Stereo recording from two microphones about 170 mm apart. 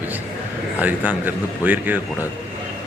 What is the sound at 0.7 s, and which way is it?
Speech, 10° right (ahead or behind).